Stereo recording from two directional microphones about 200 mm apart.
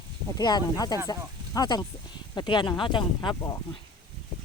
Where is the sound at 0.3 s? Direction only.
20° left (ahead or behind).